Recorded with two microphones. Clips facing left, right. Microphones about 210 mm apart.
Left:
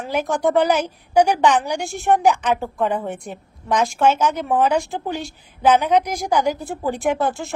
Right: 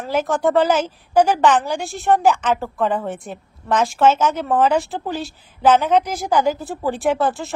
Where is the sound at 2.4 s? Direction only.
15° left (ahead or behind).